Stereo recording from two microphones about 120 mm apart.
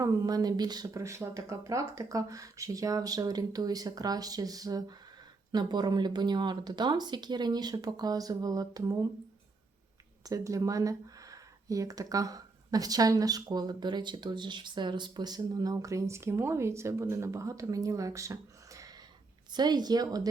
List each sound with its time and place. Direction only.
0.0 s speech: 30° right (ahead or behind)
10.2 s speech: 30° right (ahead or behind)